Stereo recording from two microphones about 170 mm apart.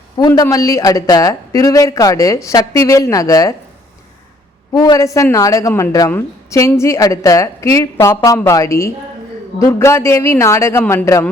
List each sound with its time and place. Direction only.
0.2 s speech: 20° left (ahead or behind)
4.7 s a man's voice: 20° left (ahead or behind)